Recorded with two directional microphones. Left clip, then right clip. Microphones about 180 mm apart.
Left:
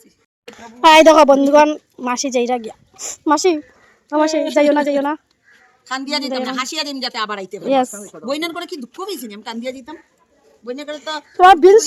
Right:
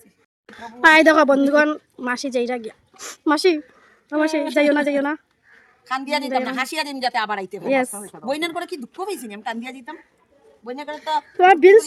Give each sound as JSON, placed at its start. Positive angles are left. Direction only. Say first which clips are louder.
{"t": 0.5, "sound": "speech", "louder": "left 4 dB", "side_deg": 10}
{"t": 2.9, "sound": "speech", "louder": "left 4 dB", "side_deg": -5}
{"t": 5.8, "sound": "a woman's voice", "louder": "left 1 dB", "side_deg": -15}
{"t": 7.7, "sound": "speech", "louder": "left 4 dB", "side_deg": 10}
{"t": 8.0, "sound": "a woman's voice", "louder": "left 2 dB", "side_deg": -15}